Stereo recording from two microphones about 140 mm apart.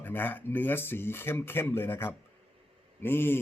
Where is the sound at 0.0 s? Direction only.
15° left (ahead or behind).